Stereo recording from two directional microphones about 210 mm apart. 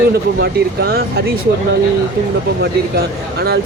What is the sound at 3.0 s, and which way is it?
Speech, 50° right (ahead or behind).